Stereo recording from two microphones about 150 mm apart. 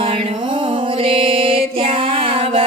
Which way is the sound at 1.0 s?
35° right (ahead or behind).